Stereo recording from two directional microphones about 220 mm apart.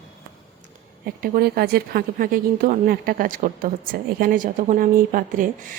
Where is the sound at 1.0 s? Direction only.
45° right (ahead or behind).